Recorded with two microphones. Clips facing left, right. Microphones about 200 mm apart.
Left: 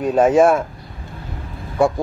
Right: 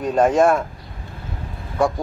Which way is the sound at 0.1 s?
5° left (ahead or behind).